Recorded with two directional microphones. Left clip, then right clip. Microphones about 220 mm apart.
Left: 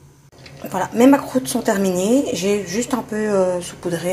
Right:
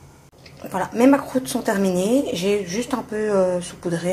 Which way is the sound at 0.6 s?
5° left (ahead or behind).